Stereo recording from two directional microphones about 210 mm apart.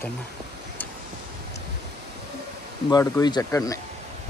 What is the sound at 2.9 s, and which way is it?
Speech, 20° left (ahead or behind).